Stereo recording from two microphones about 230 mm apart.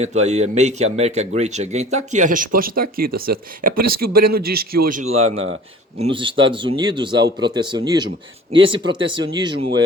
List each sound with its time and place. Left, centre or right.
0.0 s speech: right
5.2 s speech: right
6.0 s speech: right